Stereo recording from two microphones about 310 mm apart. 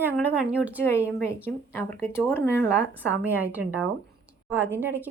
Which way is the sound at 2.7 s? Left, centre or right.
Centre.